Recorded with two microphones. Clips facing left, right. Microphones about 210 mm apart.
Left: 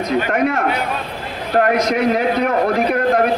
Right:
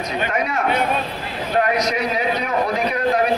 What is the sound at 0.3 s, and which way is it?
A man's voice, 55° left (ahead or behind).